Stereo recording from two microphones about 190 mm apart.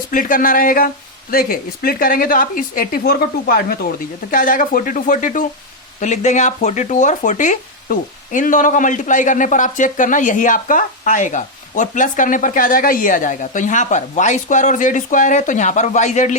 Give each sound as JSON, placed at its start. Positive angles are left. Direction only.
{"t": 0.1, "sound": "speech", "side_deg": 45}